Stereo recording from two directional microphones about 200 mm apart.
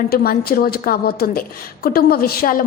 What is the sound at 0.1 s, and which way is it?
A woman's voice, 50° left (ahead or behind).